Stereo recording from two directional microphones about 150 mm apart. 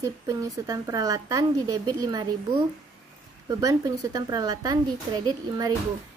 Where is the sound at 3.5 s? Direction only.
25° right (ahead or behind).